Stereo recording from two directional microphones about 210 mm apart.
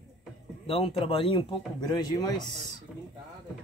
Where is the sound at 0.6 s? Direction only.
25° left (ahead or behind).